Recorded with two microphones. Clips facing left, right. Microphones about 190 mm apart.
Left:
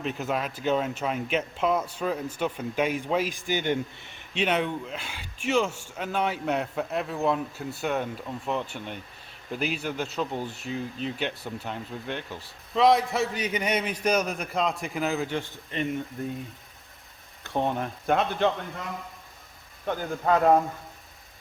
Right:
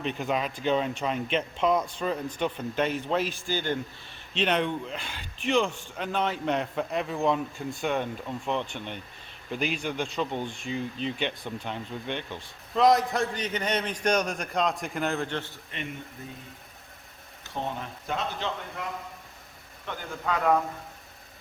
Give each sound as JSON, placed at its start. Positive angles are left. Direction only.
{"t": 0.0, "sound": "speech", "side_deg": 5}
{"t": 17.4, "sound": "speech", "side_deg": 60}
{"t": 19.8, "sound": "a man's voice", "side_deg": 45}